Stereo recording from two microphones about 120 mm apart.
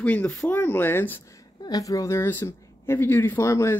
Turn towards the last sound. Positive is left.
turn(degrees=25)  # may be behind; listen again after turning